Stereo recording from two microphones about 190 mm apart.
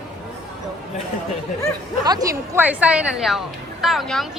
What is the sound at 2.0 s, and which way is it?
Speech, 20° right (ahead or behind).